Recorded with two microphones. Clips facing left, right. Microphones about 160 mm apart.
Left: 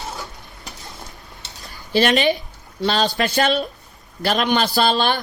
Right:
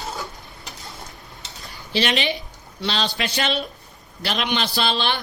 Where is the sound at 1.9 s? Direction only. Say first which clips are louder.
Left 6 dB; 45° left (ahead or behind).